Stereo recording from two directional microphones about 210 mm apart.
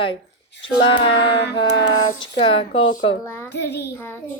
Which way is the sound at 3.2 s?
10° left (ahead or behind).